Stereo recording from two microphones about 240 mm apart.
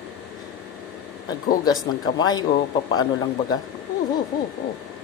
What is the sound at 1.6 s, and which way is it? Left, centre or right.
Speech, centre.